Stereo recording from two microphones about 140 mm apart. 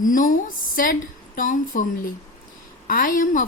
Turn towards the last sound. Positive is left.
turn(degrees=70)  # may be behind; listen again after turning